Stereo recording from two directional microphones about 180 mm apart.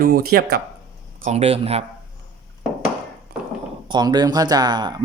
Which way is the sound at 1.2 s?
40° right (ahead or behind).